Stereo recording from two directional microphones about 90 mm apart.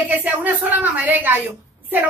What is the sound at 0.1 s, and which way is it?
A woman's voice, 20° right (ahead or behind).